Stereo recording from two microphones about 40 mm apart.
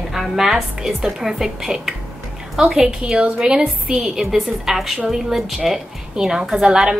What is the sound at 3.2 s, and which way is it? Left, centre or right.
Speech, right.